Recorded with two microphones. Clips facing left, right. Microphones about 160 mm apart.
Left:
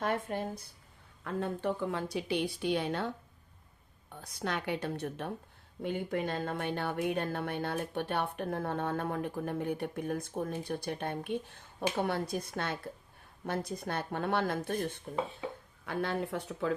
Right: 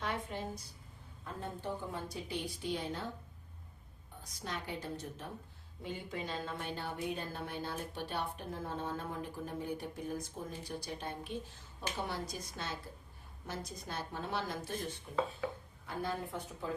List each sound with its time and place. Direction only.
0.0 s a sound: 50° left (ahead or behind)
1.2 s a woman's voice: 70° left (ahead or behind)
4.2 s a woman's voice: 65° left (ahead or behind)
15.9 s a woman's voice: 70° left (ahead or behind)